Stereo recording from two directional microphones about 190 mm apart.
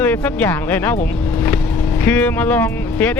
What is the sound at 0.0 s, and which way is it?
Speech, 10° left (ahead or behind).